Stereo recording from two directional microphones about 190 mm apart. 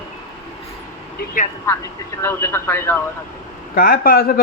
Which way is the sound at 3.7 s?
50° left (ahead or behind).